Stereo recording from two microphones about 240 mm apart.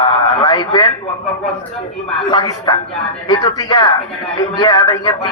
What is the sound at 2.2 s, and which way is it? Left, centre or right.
A woman's voice, centre.